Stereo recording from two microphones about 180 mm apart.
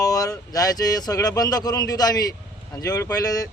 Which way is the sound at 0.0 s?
20° left (ahead or behind).